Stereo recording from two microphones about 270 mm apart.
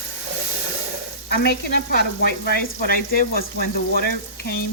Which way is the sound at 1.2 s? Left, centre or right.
Left.